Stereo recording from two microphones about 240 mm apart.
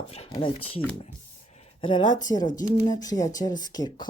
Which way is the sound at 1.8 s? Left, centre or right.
Centre.